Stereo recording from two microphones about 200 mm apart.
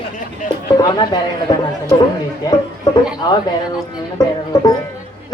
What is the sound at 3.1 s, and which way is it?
A woman's voice, 20° left (ahead or behind).